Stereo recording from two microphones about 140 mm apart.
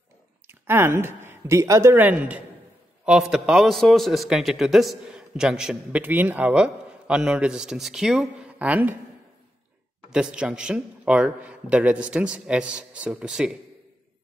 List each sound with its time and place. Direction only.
0.5 s a man's voice: 15° right (ahead or behind)
10.1 s a man's voice: 5° right (ahead or behind)